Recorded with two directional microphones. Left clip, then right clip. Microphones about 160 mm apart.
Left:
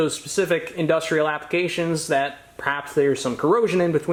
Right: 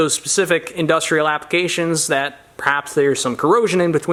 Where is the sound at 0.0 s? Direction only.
40° right (ahead or behind).